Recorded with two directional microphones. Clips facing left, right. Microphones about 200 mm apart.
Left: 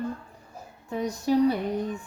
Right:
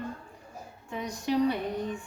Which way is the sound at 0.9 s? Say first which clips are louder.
Left 5 dB; 40° left (ahead or behind).